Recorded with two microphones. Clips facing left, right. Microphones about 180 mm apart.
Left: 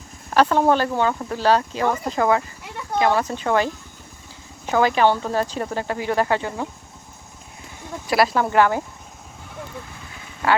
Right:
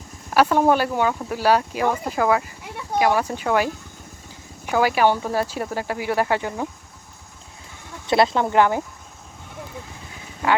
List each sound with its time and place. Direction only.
0.3 s speech: 10° right (ahead or behind)
8.0 s speech: 25° right (ahead or behind)